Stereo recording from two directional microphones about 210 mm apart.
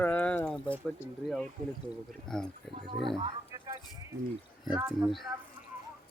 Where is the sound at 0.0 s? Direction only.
5° left (ahead or behind).